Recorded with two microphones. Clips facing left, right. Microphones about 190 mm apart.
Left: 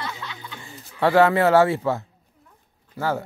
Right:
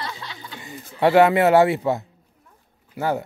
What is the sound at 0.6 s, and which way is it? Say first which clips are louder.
Speech: right 3 dB; 20° right (ahead or behind).